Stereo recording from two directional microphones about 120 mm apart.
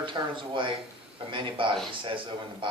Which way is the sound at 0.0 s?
40° right (ahead or behind).